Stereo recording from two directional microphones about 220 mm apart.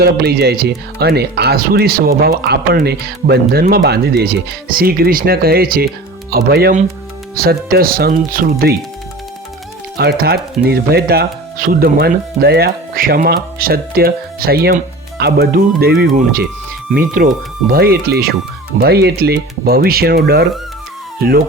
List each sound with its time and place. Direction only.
0.0 s speech: 45° right (ahead or behind)
10.0 s speech: 45° right (ahead or behind)